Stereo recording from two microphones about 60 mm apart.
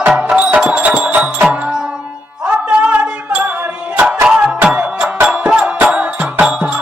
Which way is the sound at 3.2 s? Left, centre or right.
Right.